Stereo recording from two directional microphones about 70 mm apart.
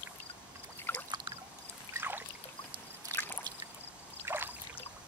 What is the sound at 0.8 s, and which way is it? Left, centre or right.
Boat, left.